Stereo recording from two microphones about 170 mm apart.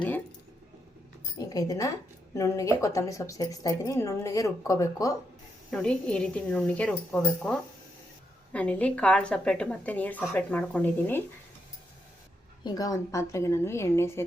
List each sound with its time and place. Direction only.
1.4 s a woman's voice: 20° left (ahead or behind)
5.7 s a woman's voice: 5° left (ahead or behind)
12.6 s a woman's voice: 20° left (ahead or behind)